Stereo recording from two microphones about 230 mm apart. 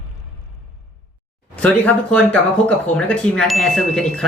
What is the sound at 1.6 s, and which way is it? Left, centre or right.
Speech, centre.